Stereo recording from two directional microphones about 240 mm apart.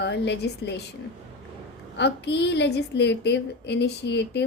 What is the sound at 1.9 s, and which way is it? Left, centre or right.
Speech, left.